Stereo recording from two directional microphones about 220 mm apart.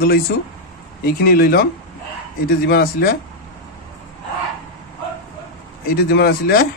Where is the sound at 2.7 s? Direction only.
45° left (ahead or behind).